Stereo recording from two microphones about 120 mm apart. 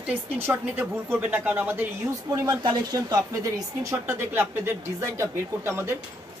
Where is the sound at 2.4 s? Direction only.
35° right (ahead or behind).